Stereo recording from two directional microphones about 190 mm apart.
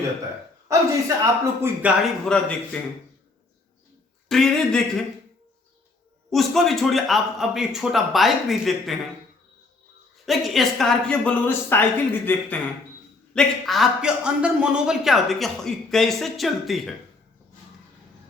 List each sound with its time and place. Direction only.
0.7 s speech: 15° right (ahead or behind)
2.3 s a man's voice: centre (ahead or behind)
4.3 s a man's voice: centre (ahead or behind)
6.3 s a man's voice: centre (ahead or behind)
10.2 s a woman's voice: centre (ahead or behind)